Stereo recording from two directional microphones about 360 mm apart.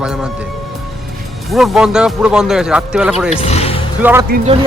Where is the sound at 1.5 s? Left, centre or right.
Centre.